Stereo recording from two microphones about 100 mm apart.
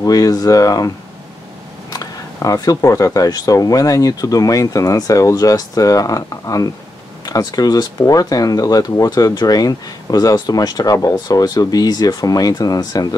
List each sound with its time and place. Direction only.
0.0 s speech: 35° left (ahead or behind)